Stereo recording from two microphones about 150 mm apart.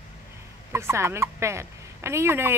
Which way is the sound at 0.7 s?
20° right (ahead or behind).